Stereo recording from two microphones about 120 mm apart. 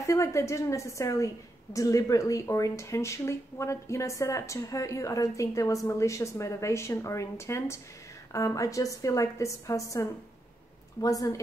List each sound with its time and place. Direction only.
0.0 s a woman's voice: 25° left (ahead or behind)